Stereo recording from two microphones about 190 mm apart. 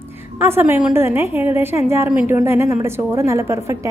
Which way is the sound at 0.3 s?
10° right (ahead or behind).